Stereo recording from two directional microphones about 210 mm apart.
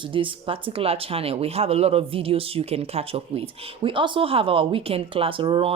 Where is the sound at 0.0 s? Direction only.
25° right (ahead or behind).